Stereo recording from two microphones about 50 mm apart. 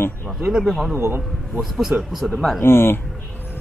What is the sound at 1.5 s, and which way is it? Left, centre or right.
Speech, centre.